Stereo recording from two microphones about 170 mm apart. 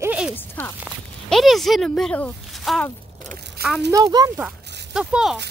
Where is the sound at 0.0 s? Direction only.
10° right (ahead or behind).